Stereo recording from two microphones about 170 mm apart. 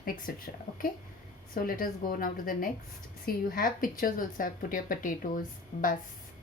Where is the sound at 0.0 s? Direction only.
55° left (ahead or behind).